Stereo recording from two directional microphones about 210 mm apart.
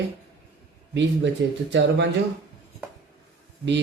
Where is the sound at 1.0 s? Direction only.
55° right (ahead or behind).